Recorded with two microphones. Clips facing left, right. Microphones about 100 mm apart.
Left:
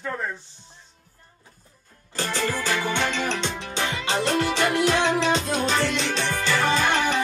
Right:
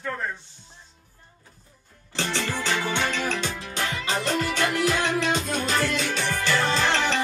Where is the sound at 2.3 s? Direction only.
10° left (ahead or behind).